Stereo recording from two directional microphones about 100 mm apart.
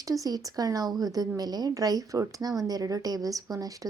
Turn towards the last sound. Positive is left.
turn(degrees=-35)  # may be behind; listen again after turning